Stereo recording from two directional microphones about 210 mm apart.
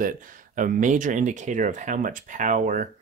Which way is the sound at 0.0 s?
40° right (ahead or behind).